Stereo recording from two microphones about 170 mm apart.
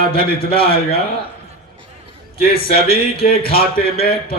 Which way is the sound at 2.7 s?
65° left (ahead or behind).